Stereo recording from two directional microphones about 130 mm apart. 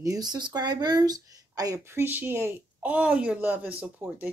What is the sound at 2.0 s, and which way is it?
A woman's voice, 15° right (ahead or behind).